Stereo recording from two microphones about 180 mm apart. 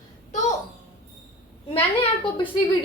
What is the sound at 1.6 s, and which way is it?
Speech, 30° left (ahead or behind).